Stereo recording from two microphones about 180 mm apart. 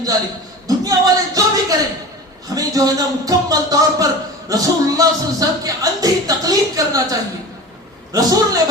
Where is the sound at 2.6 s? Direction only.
20° right (ahead or behind).